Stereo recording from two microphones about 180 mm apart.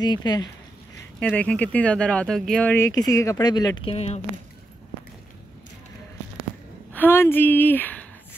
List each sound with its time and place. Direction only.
0.0 s speech: 25° left (ahead or behind)
1.2 s speech: 10° left (ahead or behind); by 4.2 s 35° left (ahead or behind)
6.9 s speech: 10° left (ahead or behind)